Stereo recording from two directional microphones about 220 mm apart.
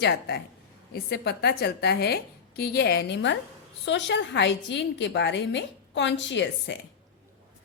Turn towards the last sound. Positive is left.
turn(degrees=55)  # may be behind; listen again after turning